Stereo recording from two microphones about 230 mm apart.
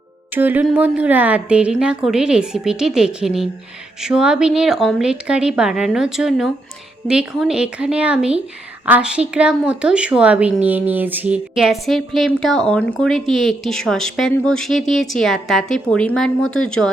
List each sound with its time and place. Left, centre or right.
0.3 s a woman's voice: centre
16.4 s speech: left
16.6 s a woman's voice: centre